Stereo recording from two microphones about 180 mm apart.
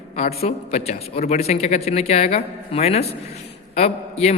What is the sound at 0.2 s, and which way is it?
A man's voice, 35° left (ahead or behind).